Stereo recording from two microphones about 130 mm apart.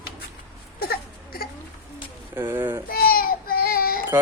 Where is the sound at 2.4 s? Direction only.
15° right (ahead or behind).